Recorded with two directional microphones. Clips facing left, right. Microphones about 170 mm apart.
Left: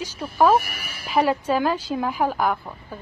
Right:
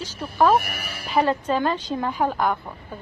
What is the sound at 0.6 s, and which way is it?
Speech, 60° right (ahead or behind).